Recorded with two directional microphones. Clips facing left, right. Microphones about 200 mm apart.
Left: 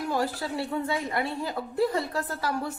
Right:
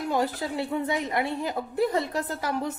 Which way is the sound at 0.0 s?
20° right (ahead or behind).